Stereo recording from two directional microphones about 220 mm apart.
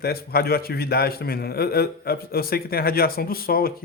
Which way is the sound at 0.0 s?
45° left (ahead or behind).